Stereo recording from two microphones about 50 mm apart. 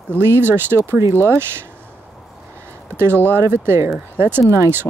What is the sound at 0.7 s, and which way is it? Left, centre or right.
Speech, right.